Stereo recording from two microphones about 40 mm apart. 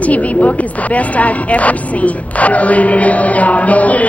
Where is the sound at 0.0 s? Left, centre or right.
Left.